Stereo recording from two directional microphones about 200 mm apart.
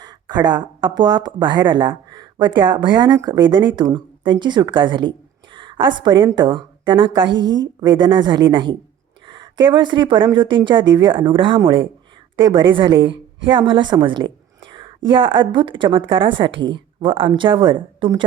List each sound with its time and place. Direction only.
0.0 s a woman's voice: 20° right (ahead or behind)